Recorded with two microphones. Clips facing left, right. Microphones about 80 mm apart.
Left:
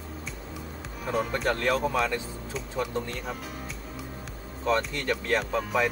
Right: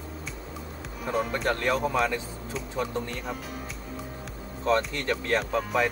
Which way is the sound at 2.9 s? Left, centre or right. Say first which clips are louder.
Even; centre.